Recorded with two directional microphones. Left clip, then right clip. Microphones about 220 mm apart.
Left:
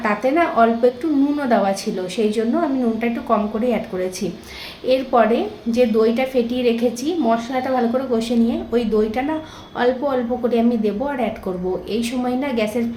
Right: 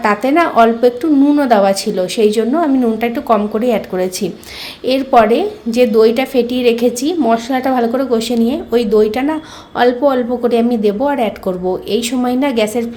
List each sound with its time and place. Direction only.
0.0 s a woman's voice: 40° right (ahead or behind)